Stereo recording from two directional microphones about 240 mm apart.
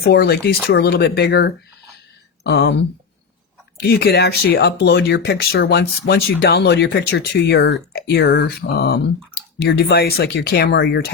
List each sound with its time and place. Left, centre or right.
0.0 s speech: left
3.8 s speech: left